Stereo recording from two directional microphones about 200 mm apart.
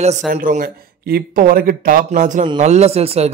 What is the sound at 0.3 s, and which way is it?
Speech, 40° right (ahead or behind).